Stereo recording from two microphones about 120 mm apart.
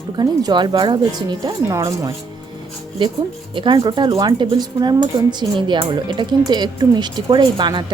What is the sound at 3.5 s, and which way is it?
Speech, 40° right (ahead or behind).